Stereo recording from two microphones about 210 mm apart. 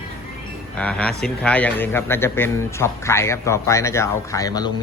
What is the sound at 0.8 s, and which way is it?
A man's voice, 5° left (ahead or behind).